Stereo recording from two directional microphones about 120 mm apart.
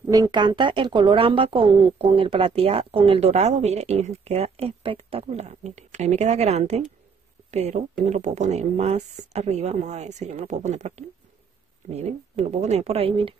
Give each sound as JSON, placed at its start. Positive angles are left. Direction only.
{"t": 0.1, "sound": "a woman's voice", "side_deg": -35}